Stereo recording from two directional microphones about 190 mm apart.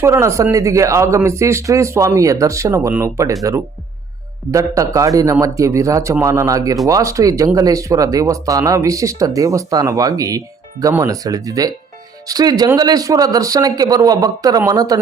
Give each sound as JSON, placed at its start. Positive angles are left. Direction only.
{"t": 0.0, "sound": "speech", "side_deg": -15}
{"t": 4.5, "sound": "a man's voice", "side_deg": -15}